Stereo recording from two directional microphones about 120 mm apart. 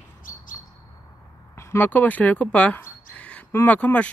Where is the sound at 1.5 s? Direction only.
20° left (ahead or behind).